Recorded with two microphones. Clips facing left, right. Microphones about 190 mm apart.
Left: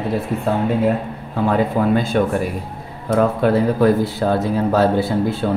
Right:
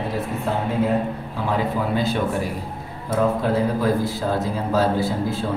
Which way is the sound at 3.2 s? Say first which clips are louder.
Left 4 dB; 65° left (ahead or behind).